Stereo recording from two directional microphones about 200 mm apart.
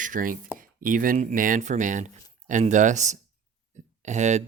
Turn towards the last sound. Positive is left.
turn(degrees=-35)  # may be behind; listen again after turning